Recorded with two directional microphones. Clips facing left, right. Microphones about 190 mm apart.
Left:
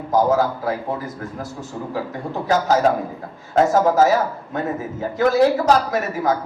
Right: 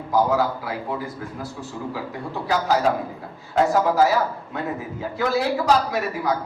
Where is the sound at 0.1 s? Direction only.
45° left (ahead or behind).